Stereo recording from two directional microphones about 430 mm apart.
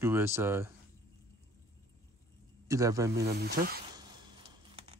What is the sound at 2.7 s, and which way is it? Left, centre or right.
Speech, centre.